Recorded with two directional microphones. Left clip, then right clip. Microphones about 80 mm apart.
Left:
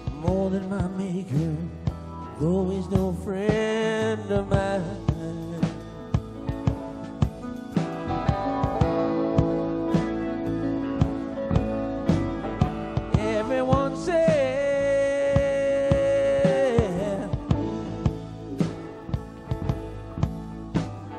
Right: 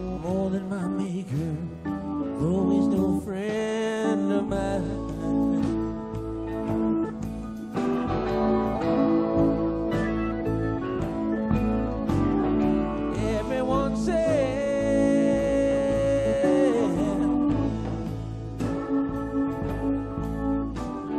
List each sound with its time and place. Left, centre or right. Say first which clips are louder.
0.3 s music: left 3 dB; right
2.4 s music: right 1 dB; right
8.1 s music: left 1 dB; right
11.4 s music: even; right